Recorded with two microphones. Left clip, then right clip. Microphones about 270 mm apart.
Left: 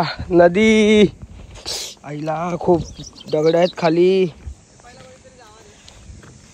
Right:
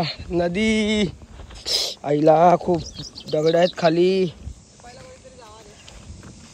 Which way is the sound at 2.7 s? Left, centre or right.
Centre.